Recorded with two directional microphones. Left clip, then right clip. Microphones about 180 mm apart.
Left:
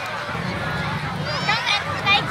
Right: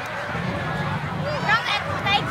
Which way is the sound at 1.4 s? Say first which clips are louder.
Even; 30° right (ahead or behind).